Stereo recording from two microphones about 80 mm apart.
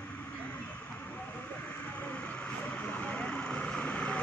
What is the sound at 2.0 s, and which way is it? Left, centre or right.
Vehicle, centre.